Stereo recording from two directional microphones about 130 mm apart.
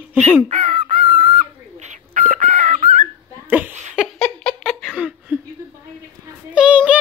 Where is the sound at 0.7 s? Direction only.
45° right (ahead or behind).